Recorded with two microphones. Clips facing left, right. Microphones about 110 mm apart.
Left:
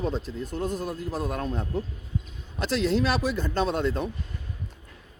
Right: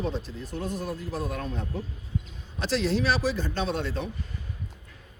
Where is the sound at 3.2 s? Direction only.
50° left (ahead or behind).